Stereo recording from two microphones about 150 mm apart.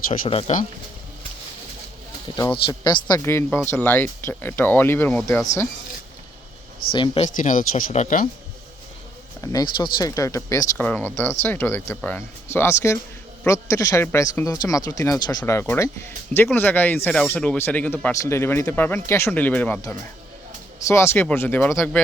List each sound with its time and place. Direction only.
0.1 s speech: 40° left (ahead or behind)
2.5 s speech: 35° left (ahead or behind)
3.2 s speech: 15° left (ahead or behind)
6.9 s speech: 35° left (ahead or behind)
7.3 s speech: 60° left (ahead or behind)
9.4 s speech: 20° left (ahead or behind)
9.7 s speech: 35° left (ahead or behind)
10.2 s speech: 20° left (ahead or behind)
10.8 s speech: 10° left (ahead or behind)